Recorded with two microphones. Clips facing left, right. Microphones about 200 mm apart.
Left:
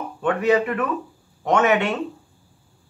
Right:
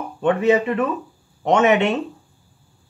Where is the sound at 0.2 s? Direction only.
25° right (ahead or behind).